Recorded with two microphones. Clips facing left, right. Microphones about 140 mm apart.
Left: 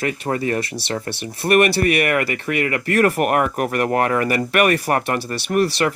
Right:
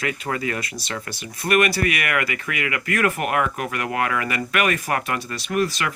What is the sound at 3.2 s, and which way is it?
Speech, 45° left (ahead or behind).